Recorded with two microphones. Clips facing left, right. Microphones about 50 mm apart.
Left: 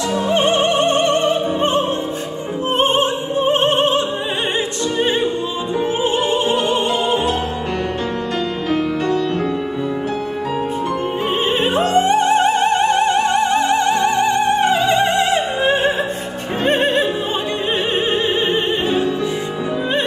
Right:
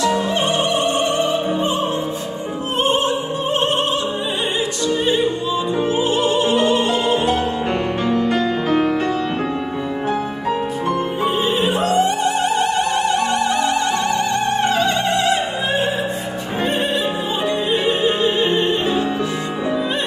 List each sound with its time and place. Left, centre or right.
0.0 s music: left
2.8 s opera: left
5.9 s music: left
11.1 s opera: left; by 15.0 s centre
15.0 s opera: left
16.6 s music: left